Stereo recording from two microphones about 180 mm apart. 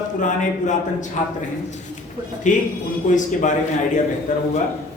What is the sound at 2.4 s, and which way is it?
Speech, 45° left (ahead or behind).